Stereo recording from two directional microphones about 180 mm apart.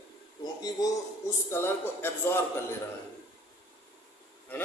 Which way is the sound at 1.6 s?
15° left (ahead or behind).